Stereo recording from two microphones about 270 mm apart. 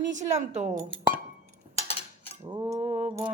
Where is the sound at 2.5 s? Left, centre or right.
Centre.